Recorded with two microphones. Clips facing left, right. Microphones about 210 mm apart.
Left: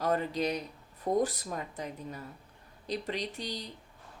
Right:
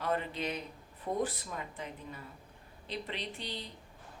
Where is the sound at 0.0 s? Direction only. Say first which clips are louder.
Left 5 dB; 40° left (ahead or behind).